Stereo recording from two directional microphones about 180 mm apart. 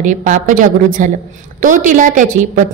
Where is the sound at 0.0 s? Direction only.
45° right (ahead or behind).